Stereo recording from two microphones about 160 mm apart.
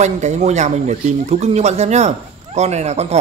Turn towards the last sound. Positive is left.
turn(degrees=-45)  # may be behind; listen again after turning